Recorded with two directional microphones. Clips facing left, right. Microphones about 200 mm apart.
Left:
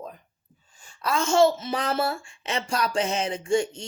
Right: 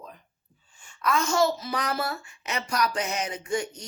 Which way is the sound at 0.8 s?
35° left (ahead or behind).